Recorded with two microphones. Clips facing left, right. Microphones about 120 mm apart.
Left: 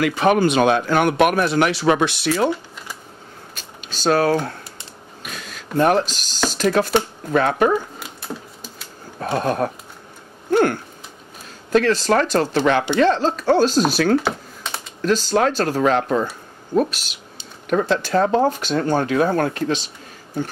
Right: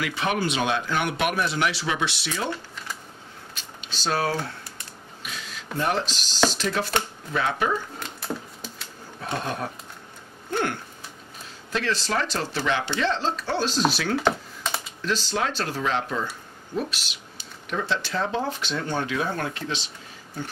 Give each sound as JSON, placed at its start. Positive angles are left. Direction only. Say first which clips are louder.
{"t": 0.0, "sound": "speech", "louder": "left 9 dB", "side_deg": 50}
{"t": 3.5, "sound": "speech", "louder": "left 2 dB", "side_deg": 45}
{"t": 8.0, "sound": "a sound", "louder": "even", "side_deg": 5}
{"t": 9.2, "sound": "speech", "louder": "left 9 dB", "side_deg": 50}
{"t": 11.7, "sound": "speech", "louder": "left 10 dB", "side_deg": 45}
{"t": 14.1, "sound": "computer keyboard", "louder": "left 4 dB", "side_deg": 0}
{"t": 15.0, "sound": "speech", "louder": "left 10 dB", "side_deg": 45}